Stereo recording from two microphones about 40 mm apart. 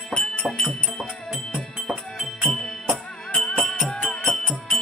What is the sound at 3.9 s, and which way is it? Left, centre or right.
Music, left.